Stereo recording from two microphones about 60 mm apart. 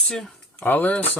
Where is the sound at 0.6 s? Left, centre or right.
Left.